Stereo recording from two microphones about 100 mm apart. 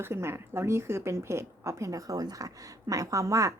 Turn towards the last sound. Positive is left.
turn(degrees=-35)  # may be behind; listen again after turning